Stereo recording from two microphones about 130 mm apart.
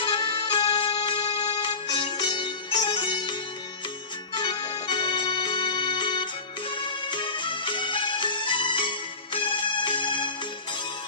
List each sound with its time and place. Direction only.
0.0 s music: 40° left (ahead or behind)
4.4 s music: 35° left (ahead or behind)